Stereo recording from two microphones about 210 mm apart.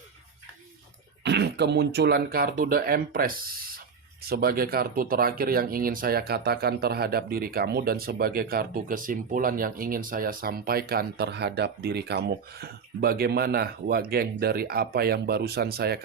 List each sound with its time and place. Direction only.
1.2 s speech: 55° right (ahead or behind)